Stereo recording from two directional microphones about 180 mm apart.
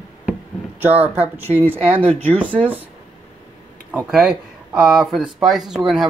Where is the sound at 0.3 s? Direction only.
10° right (ahead or behind).